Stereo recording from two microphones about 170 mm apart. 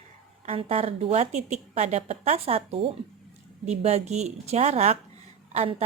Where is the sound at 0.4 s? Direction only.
35° right (ahead or behind).